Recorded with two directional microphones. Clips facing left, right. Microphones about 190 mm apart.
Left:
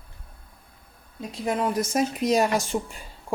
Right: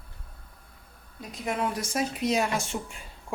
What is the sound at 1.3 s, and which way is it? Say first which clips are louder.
Speech: left 4 dB; 35° left (ahead or behind).